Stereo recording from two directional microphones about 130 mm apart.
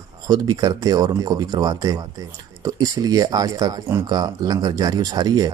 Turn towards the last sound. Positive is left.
turn(degrees=-30)  # may be behind; listen again after turning